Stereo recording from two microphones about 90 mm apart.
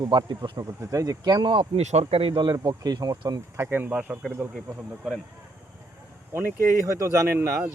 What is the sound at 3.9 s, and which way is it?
Speech, 10° right (ahead or behind).